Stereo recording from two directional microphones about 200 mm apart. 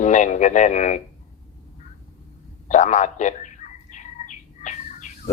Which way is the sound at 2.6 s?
40° left (ahead or behind).